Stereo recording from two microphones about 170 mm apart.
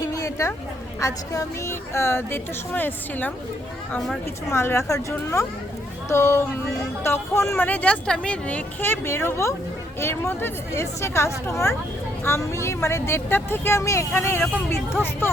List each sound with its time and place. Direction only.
0.0 s a sound: 20° left (ahead or behind)
0.9 s speech: 20° left (ahead or behind); by 4.2 s centre (ahead or behind)
4.4 s speech: 15° left (ahead or behind)